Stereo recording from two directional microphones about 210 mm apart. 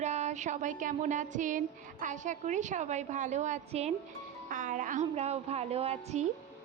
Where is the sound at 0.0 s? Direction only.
35° right (ahead or behind).